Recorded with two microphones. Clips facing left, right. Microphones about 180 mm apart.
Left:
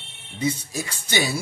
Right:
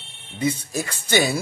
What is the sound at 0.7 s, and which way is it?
Speech, 55° right (ahead or behind).